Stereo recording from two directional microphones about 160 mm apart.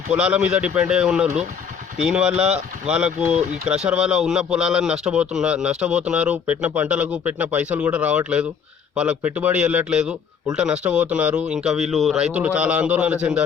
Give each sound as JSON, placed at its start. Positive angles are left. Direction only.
{"t": 0.1, "sound": "speech", "side_deg": -10}